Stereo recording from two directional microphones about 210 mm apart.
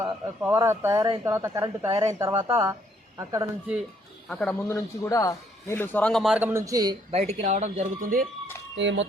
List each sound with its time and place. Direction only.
0.0 s speech: 10° right (ahead or behind)
4.3 s a man's voice: 5° left (ahead or behind); by 6.9 s 15° right (ahead or behind)
7.1 s speech: 30° right (ahead or behind)
8.7 s speech: 60° right (ahead or behind)